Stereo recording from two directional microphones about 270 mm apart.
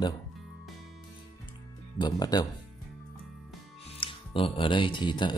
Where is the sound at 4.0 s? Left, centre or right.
Centre.